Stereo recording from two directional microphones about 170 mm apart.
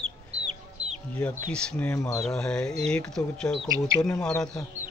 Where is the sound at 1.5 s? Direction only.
5° left (ahead or behind).